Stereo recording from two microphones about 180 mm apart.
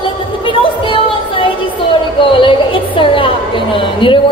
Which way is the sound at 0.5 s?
30° left (ahead or behind).